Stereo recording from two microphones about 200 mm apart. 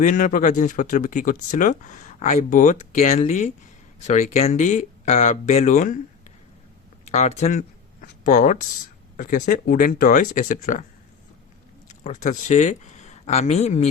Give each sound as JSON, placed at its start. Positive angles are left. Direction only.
{"t": 0.0, "sound": "speech", "side_deg": 40}
{"t": 7.0, "sound": "speech", "side_deg": 35}
{"t": 11.9, "sound": "speech", "side_deg": 35}